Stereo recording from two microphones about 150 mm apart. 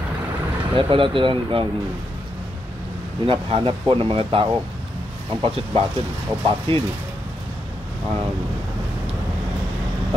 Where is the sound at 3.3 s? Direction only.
35° right (ahead or behind).